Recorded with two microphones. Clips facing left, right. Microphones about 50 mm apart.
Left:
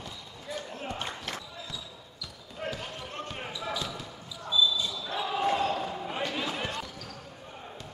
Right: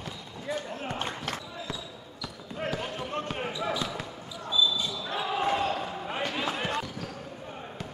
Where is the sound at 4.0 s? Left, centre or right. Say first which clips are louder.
Right 3 dB; centre.